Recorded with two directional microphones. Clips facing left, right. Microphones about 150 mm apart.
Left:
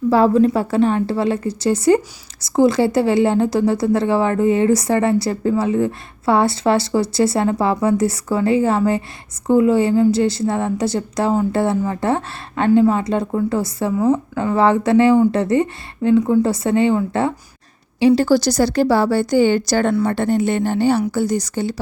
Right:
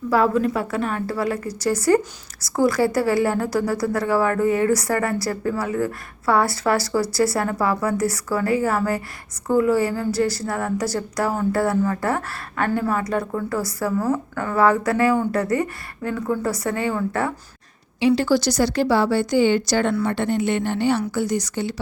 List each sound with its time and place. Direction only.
0.1 s a woman's voice: 30° left (ahead or behind)
18.0 s a woman's voice: 35° left (ahead or behind)